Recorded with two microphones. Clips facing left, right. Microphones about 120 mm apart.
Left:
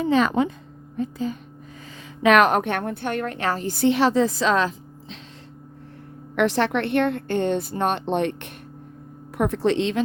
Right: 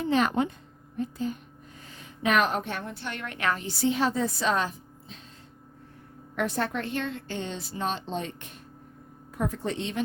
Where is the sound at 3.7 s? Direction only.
65° left (ahead or behind); by 5.1 s 90° left.